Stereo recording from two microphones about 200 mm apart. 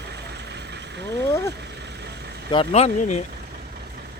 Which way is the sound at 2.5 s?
30° left (ahead or behind).